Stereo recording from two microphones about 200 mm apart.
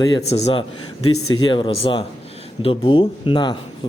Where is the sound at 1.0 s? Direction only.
90° left.